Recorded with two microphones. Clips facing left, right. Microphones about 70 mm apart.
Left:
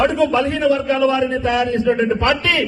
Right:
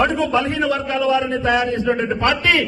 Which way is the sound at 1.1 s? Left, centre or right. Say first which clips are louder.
Even; left.